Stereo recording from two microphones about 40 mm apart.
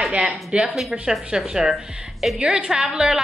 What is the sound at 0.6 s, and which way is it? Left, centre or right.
Speech, centre.